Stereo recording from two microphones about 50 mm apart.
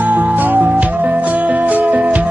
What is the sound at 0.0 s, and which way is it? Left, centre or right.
Music, right.